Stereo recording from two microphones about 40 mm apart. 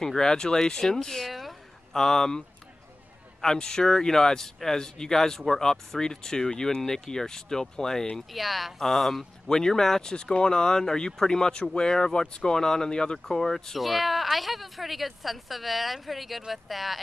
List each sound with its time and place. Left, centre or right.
0.0 s speech: centre
8.3 s speech: centre
10.1 s speech: left
13.7 s speech: centre